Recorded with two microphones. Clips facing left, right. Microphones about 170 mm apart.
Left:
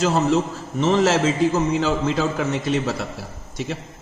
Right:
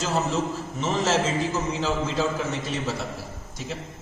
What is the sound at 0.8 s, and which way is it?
A man's voice, 70° left (ahead or behind).